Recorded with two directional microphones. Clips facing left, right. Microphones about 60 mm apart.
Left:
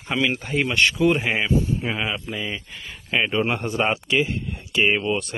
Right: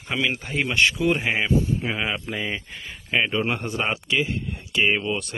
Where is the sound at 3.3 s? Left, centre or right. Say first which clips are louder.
Left 2 dB; left.